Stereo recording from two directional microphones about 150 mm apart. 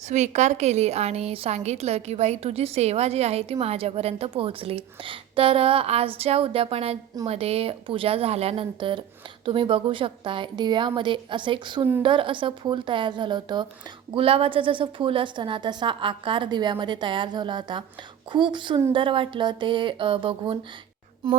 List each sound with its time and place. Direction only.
0.1 s a woman's voice: 50° right (ahead or behind)